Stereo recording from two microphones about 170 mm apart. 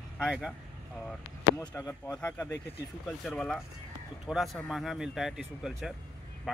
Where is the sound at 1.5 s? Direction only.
15° left (ahead or behind).